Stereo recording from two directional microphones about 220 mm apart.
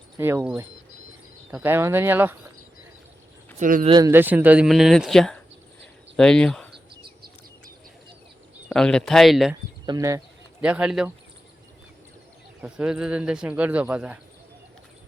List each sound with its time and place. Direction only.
0.2 s speech: 10° right (ahead or behind)
3.6 s speech: 40° right (ahead or behind)
3.8 s speech: 20° right (ahead or behind); by 6.7 s 5° left (ahead or behind)
8.7 s speech: 5° left (ahead or behind)
9.8 s speech: 15° right (ahead or behind)
10.6 s speech: 5° right (ahead or behind)
12.6 s speech: 5° right (ahead or behind)